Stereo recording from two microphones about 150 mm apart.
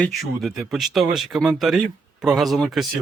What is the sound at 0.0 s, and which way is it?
Speech, centre (ahead or behind).